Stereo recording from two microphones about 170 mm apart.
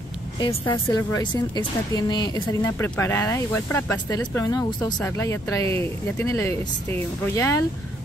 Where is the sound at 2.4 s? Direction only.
15° left (ahead or behind).